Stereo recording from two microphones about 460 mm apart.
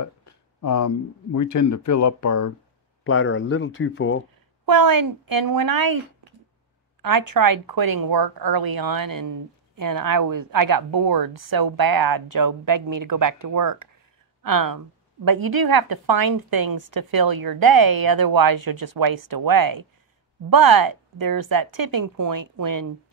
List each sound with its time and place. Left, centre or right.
0.6 s speech: left
3.0 s speech: left
4.6 s speech: right
7.0 s speech: right